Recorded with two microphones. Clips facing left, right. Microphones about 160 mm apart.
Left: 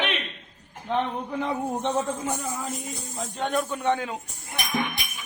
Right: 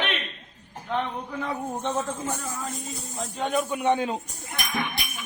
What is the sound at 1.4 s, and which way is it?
A man's voice, 20° left (ahead or behind).